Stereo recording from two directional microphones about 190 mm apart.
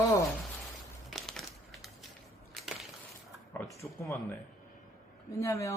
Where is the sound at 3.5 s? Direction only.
10° left (ahead or behind).